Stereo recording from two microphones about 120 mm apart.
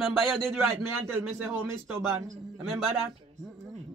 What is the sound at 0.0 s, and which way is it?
Speech, 5° left (ahead or behind).